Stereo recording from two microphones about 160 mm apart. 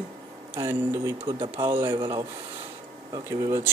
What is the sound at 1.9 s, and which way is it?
Speech, 30° right (ahead or behind).